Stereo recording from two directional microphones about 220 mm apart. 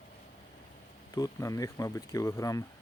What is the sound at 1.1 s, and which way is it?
Speech, 15° left (ahead or behind).